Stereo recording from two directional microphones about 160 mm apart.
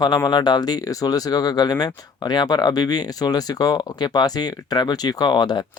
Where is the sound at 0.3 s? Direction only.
25° left (ahead or behind).